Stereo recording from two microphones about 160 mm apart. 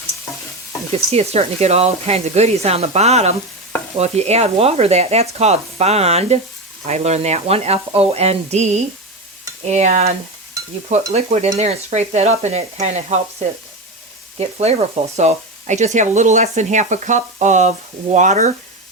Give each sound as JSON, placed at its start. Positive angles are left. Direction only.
{"t": 1.1, "sound": "speech", "side_deg": -40}
{"t": 11.1, "sound": "speech", "side_deg": -45}
{"t": 14.3, "sound": "speech", "side_deg": -40}